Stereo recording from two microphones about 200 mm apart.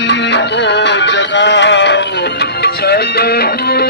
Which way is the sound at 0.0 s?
60° left (ahead or behind).